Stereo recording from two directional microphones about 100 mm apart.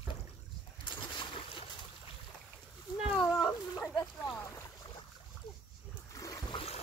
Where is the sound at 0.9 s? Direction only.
50° left (ahead or behind).